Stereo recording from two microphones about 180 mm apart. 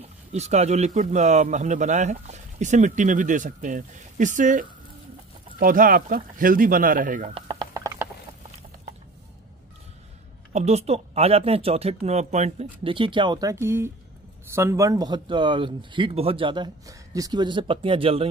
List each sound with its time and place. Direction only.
0.3 s a man's voice: 40° right (ahead or behind)
7.3 s chopping: 25° right (ahead or behind)
10.5 s a man's voice: 40° right (ahead or behind)